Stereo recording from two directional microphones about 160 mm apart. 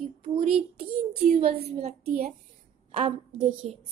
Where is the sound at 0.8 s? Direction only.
50° right (ahead or behind).